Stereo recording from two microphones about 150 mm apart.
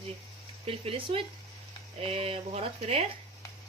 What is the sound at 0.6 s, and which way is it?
Speech, 40° right (ahead or behind).